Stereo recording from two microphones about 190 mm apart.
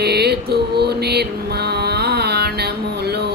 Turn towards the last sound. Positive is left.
turn(degrees=-60)  # may be behind; listen again after turning